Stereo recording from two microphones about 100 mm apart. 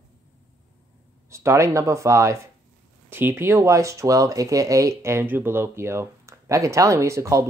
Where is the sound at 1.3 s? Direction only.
30° right (ahead or behind).